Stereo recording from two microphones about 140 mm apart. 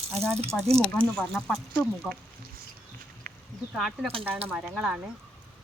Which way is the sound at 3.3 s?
90° right.